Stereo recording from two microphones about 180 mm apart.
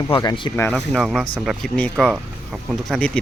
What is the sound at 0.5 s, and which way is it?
Speech, 10° left (ahead or behind).